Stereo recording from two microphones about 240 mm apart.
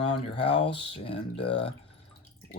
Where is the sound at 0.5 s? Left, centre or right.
Left.